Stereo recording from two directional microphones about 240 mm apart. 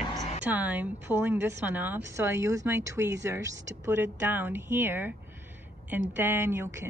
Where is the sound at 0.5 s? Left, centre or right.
Centre.